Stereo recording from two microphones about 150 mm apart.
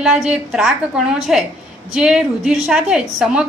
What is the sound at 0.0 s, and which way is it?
A woman's voice, 5° right (ahead or behind).